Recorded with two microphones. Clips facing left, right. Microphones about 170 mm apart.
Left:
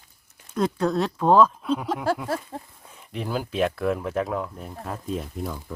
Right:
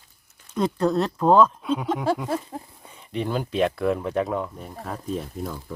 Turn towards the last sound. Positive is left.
turn(degrees=0)  # may be behind; listen again after turning